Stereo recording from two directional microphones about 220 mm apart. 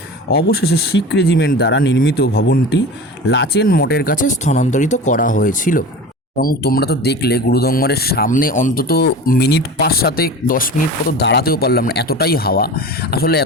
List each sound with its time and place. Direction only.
0.3 s speech: 45° left (ahead or behind)